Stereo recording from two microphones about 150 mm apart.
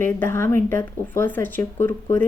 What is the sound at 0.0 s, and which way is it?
Speech, 15° left (ahead or behind).